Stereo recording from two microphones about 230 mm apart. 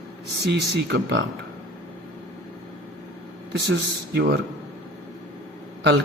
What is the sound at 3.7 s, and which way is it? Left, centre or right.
Speech, right.